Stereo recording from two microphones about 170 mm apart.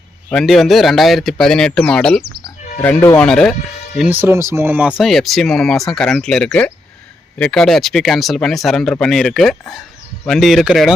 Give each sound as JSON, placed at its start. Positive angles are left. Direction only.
{"t": 0.3, "sound": "speech", "side_deg": 5}
{"t": 3.9, "sound": "speech", "side_deg": -5}